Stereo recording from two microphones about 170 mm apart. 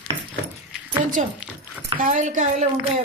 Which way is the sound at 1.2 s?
45° right (ahead or behind).